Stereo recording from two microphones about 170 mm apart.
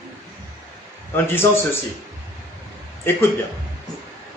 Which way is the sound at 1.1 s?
15° left (ahead or behind).